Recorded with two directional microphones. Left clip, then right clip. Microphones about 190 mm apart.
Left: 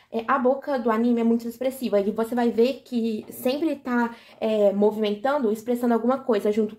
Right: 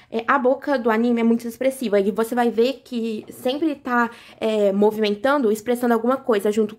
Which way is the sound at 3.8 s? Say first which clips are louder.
Right 5 dB; 35° right (ahead or behind).